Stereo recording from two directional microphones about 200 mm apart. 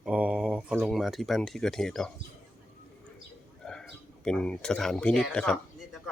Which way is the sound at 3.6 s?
5° left (ahead or behind).